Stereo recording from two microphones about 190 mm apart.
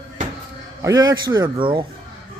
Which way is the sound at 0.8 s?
20° right (ahead or behind).